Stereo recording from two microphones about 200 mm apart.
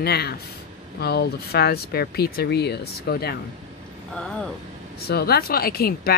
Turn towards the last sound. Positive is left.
turn(degrees=50)  # may be behind; listen again after turning